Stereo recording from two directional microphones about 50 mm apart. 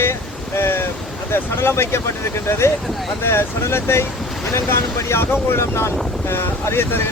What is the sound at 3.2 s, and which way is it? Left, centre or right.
Speech, left.